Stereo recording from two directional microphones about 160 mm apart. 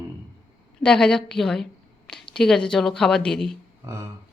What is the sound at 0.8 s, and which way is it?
A woman's voice, 5° left (ahead or behind).